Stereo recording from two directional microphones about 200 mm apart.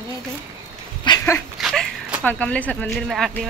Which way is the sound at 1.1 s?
15° left (ahead or behind).